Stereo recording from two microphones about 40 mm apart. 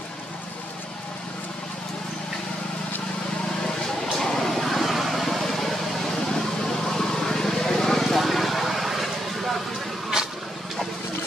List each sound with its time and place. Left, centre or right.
4.2 s vehicle: centre